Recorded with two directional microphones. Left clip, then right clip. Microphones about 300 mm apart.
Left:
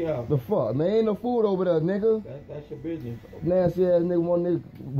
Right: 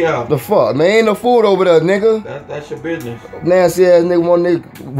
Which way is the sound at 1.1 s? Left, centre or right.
Centre.